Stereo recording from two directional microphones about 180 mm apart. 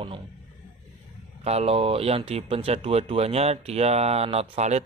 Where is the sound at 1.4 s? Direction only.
35° right (ahead or behind).